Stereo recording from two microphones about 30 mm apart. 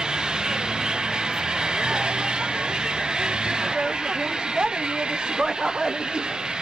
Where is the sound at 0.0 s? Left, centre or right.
Right.